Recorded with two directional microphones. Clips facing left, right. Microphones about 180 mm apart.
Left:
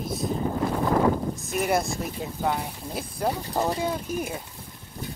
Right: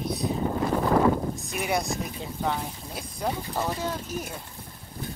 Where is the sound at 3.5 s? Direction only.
15° left (ahead or behind).